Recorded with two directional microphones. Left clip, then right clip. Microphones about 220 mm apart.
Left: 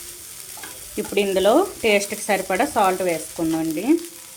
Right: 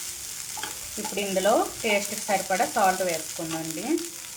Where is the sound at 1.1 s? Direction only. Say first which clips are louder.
Left 6 dB; 50° left (ahead or behind).